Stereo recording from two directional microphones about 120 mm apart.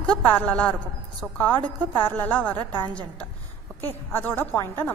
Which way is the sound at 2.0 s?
15° left (ahead or behind).